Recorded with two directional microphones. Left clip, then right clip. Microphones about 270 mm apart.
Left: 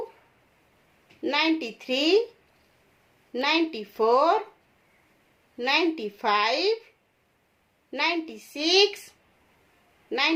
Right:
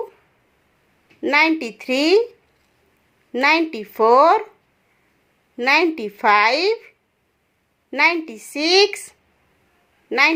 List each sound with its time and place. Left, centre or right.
1.2 s a woman's voice: right
3.3 s a woman's voice: right
5.5 s a woman's voice: right
7.9 s a woman's voice: right
10.1 s a woman's voice: right